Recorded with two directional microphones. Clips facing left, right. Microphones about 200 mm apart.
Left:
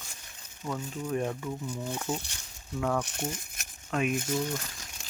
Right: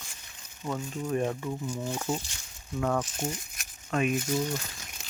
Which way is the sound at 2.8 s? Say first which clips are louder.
Right 1 dB; 5° right (ahead or behind).